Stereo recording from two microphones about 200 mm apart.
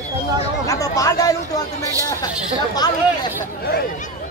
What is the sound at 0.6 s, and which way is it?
Speech, 15° left (ahead or behind).